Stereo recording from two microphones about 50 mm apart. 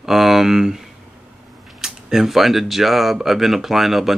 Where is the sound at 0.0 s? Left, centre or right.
Centre.